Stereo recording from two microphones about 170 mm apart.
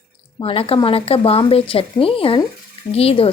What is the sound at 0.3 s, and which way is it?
A woman's voice, 35° left (ahead or behind).